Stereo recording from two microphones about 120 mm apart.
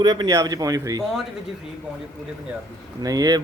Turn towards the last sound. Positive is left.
turn(degrees=-30)  # may be behind; listen again after turning